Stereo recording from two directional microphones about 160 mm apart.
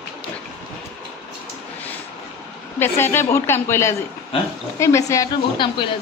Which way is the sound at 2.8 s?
15° left (ahead or behind).